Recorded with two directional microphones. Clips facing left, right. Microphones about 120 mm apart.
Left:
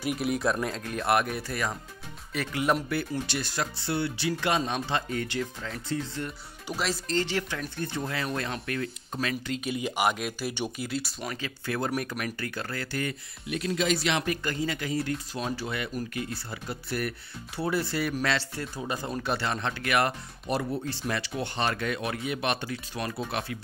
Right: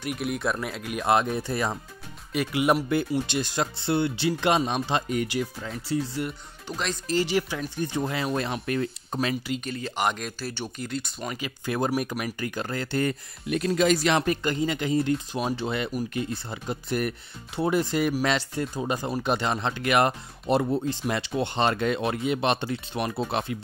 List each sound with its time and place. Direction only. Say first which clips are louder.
0.0 s speech: left 1 dB; centre (ahead or behind); by 1.8 s 30° right (ahead or behind)
2.3 s speech: right 4 dB; 15° right (ahead or behind)
6.7 s speech: even; 5° left (ahead or behind)
7.1 s speech: right 8 dB; 10° right (ahead or behind); by 8.9 s 25° right (ahead or behind)
9.7 s speech: left 2 dB; 10° left (ahead or behind)
11.3 s speech: right 4 dB; 15° right (ahead or behind)
13.0 s speech: right 6 dB; 45° right (ahead or behind)
14.3 s speech: right 4 dB; 25° right (ahead or behind)